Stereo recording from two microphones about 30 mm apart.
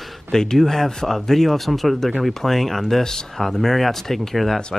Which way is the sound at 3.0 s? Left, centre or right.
Centre.